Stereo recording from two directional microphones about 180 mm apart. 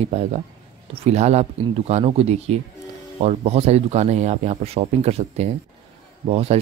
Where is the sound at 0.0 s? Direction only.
35° right (ahead or behind).